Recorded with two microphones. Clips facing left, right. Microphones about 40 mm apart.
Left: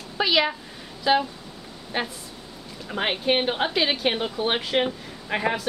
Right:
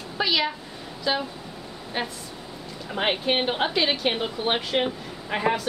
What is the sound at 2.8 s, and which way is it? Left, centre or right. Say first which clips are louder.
A woman's voice: even; centre.